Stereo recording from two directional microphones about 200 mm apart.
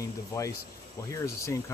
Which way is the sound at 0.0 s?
15° left (ahead or behind).